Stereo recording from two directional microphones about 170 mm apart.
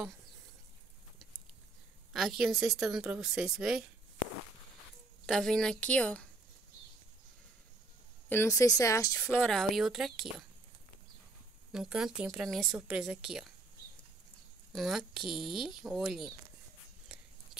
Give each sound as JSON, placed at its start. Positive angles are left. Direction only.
{"t": 2.1, "sound": "a woman's voice", "side_deg": 0}
{"t": 5.2, "sound": "a woman's voice", "side_deg": 5}
{"t": 8.3, "sound": "speech", "side_deg": 15}
{"t": 9.4, "sound": "a woman's voice", "side_deg": 0}
{"t": 11.7, "sound": "a woman's voice", "side_deg": -5}
{"t": 14.7, "sound": "a woman's voice", "side_deg": 0}